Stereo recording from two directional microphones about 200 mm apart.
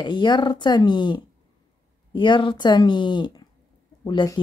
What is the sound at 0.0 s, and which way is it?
Speech, 20° left (ahead or behind).